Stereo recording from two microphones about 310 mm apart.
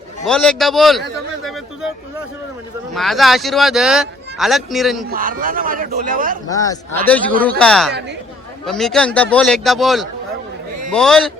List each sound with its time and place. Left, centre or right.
0.3 s speech: centre
2.9 s speech: centre
5.0 s a man's voice: right
6.5 s a man's voice: centre